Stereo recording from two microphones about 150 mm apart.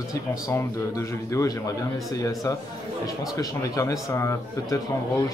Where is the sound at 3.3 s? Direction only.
20° left (ahead or behind).